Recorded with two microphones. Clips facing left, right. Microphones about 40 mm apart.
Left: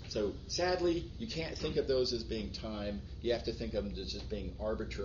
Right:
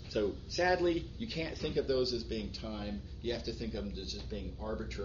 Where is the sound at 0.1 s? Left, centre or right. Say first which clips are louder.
Right 2 dB; right.